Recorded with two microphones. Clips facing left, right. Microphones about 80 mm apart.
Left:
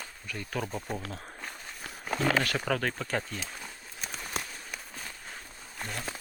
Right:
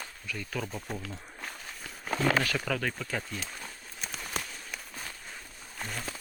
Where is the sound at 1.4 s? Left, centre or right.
Centre.